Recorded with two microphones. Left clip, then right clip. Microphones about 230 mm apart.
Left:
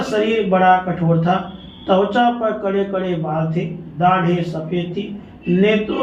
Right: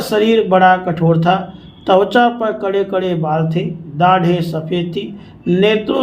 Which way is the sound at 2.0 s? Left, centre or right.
Right.